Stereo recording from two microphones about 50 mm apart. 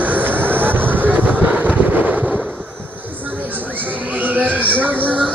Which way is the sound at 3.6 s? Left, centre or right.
Right.